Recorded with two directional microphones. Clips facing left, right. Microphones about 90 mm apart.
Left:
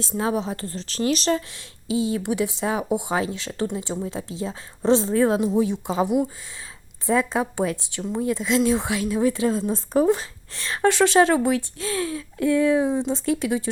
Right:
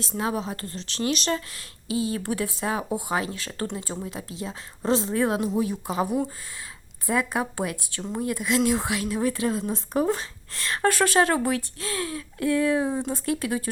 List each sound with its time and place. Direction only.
0.0 s speech: 25° left (ahead or behind)